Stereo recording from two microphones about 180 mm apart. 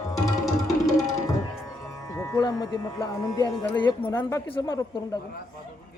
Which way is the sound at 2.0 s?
15° left (ahead or behind).